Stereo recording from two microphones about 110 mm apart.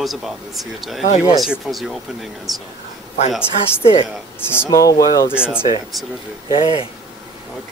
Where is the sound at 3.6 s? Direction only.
55° left (ahead or behind).